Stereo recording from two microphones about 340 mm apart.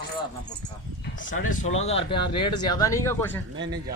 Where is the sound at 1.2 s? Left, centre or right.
Left; by 3.4 s centre.